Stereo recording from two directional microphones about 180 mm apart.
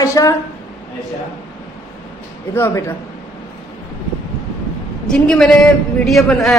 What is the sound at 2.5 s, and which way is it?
Speech, 15° left (ahead or behind).